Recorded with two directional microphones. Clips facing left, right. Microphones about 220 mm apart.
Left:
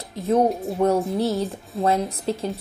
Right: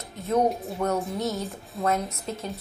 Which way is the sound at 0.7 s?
30° left (ahead or behind).